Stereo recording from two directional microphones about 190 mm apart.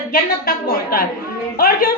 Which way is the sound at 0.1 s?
50° left (ahead or behind).